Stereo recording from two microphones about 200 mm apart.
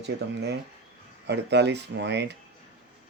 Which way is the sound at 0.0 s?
55° right (ahead or behind).